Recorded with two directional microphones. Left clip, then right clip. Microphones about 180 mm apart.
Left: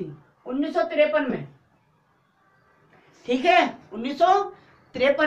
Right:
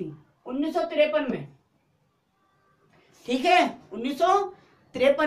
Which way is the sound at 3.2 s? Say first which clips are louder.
Left 2 dB; 30° right (ahead or behind).